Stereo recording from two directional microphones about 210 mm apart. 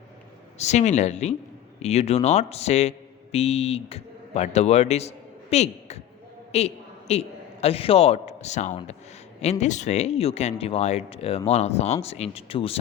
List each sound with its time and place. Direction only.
0.6 s a man's voice: 35° left (ahead or behind)